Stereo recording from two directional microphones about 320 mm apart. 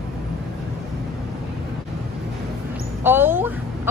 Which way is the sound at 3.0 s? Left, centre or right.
Centre.